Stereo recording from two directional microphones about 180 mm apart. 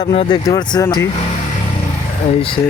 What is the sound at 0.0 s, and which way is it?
Speech, 30° left (ahead or behind).